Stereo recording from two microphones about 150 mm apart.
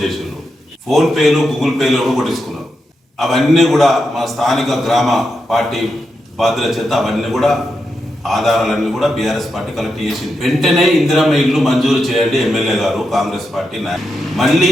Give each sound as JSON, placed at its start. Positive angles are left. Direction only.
{"t": 0.0, "sound": "a man's voice", "side_deg": 0}